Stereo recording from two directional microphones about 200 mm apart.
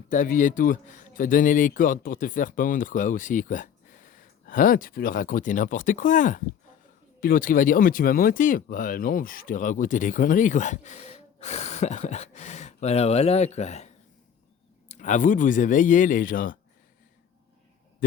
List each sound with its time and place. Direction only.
0.1 s speech: 40° left (ahead or behind)